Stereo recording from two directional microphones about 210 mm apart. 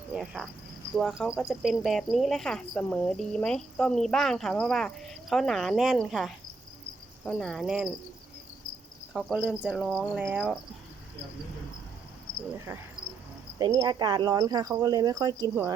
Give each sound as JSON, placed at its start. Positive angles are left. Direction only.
{"t": 0.1, "sound": "cricket", "side_deg": 0}
{"t": 0.9, "sound": "speech", "side_deg": 0}
{"t": 9.1, "sound": "speech", "side_deg": 0}
{"t": 12.5, "sound": "speech", "side_deg": -10}